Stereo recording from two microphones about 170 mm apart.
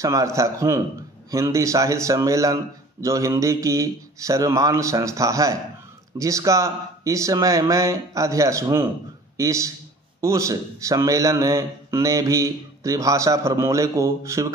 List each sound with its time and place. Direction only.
0.0 s speech: 20° right (ahead or behind)